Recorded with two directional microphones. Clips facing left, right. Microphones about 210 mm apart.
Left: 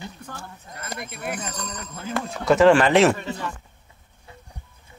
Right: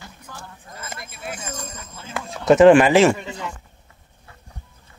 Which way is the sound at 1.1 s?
55° left (ahead or behind).